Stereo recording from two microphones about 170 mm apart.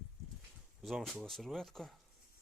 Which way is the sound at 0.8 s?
Centre (ahead or behind).